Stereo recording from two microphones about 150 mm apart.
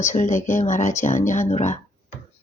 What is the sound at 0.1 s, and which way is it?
Speech, 55° left (ahead or behind).